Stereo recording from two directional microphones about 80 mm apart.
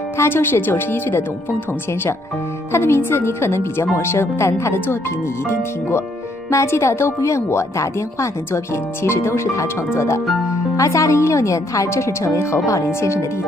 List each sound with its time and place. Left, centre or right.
0.2 s a woman's voice: left